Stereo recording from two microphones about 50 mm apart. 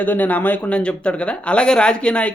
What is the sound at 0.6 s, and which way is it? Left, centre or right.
Speech, left.